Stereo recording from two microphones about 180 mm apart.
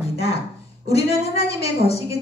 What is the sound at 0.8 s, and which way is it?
A woman's voice, 35° left (ahead or behind).